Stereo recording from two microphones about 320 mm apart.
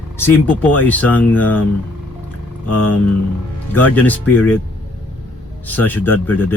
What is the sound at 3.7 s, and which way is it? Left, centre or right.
Speech, centre.